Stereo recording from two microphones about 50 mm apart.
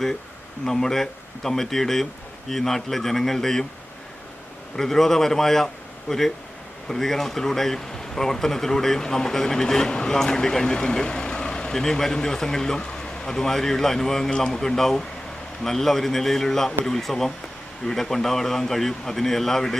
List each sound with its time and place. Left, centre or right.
0.6 s speech: centre
4.8 s speech: centre